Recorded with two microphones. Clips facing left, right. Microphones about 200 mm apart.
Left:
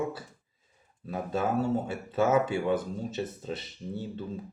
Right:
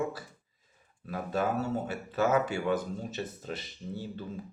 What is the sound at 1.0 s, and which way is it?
Speech, 25° left (ahead or behind).